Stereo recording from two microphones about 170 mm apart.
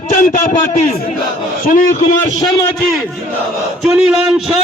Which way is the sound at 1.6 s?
55° left (ahead or behind).